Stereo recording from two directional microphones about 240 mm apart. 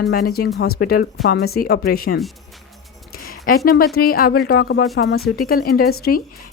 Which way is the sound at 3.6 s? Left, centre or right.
Left.